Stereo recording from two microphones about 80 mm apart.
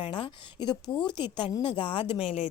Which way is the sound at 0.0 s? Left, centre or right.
Left.